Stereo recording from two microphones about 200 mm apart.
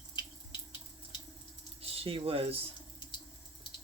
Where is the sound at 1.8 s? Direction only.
30° right (ahead or behind).